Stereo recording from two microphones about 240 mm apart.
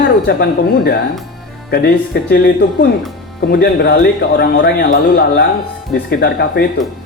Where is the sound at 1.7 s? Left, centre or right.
Left.